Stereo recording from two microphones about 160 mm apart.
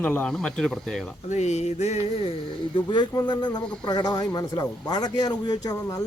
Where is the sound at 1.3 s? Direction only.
45° left (ahead or behind).